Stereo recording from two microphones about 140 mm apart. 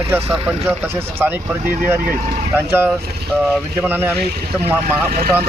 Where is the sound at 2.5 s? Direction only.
15° right (ahead or behind).